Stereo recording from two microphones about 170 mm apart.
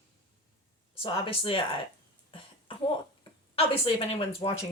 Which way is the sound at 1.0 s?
30° left (ahead or behind).